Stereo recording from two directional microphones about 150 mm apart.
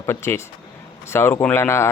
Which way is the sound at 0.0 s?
15° left (ahead or behind).